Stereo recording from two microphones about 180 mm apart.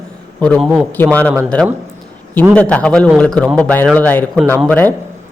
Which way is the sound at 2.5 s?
5° left (ahead or behind).